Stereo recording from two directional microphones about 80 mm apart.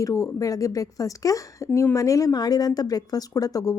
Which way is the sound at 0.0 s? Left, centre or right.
Left.